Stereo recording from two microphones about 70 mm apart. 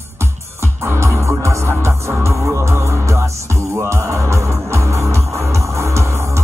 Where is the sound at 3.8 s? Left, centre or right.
Right.